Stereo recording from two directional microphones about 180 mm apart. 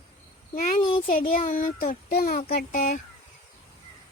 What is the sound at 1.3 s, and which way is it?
A child's voice, 40° left (ahead or behind).